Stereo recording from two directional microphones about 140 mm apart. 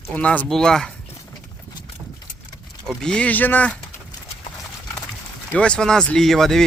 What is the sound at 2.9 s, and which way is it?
Speech, 5° left (ahead or behind).